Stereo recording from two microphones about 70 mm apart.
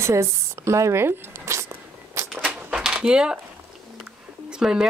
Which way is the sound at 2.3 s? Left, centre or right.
Centre.